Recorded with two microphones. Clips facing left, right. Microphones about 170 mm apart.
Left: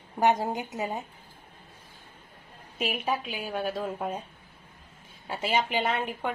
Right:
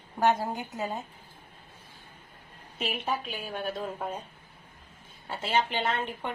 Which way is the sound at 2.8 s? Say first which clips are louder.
Left 2 dB; 10° left (ahead or behind).